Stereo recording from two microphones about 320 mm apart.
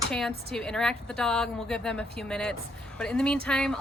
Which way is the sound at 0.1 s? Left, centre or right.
Centre.